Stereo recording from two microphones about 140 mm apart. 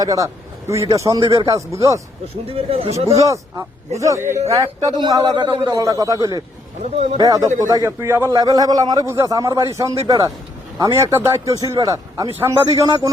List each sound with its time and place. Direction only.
0.0 s speech: 25° right (ahead or behind)
2.5 s speech: 45° right (ahead or behind)
3.2 s speech: 20° right (ahead or behind)